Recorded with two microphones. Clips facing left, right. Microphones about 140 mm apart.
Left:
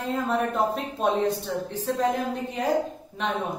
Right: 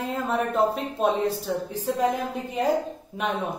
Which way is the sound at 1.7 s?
10° right (ahead or behind).